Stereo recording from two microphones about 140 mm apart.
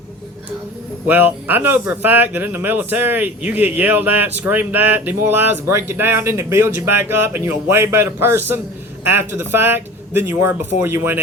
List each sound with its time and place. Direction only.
1.0 s speech: 10° right (ahead or behind)